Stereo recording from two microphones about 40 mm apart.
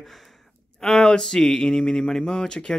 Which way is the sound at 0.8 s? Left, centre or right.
Centre.